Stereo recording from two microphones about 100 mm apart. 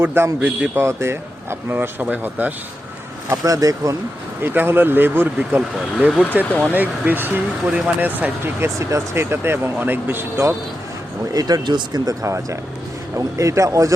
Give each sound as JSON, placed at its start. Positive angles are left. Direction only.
{"t": 0.0, "sound": "speech", "side_deg": -20}
{"t": 0.9, "sound": "speech", "side_deg": -25}
{"t": 3.2, "sound": "speech", "side_deg": -35}
{"t": 4.4, "sound": "speech", "side_deg": -20}
{"t": 6.4, "sound": "speech", "side_deg": 15}
{"t": 6.7, "sound": "speech", "side_deg": -20}
{"t": 11.3, "sound": "speech", "side_deg": -40}